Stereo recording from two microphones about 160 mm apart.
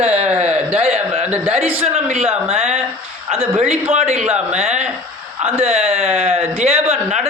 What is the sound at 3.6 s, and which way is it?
Speech, 40° right (ahead or behind).